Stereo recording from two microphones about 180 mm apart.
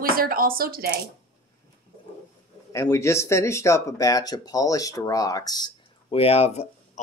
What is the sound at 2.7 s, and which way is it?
Speech, 15° left (ahead or behind).